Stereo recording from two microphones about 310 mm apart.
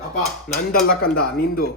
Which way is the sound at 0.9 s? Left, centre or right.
Left.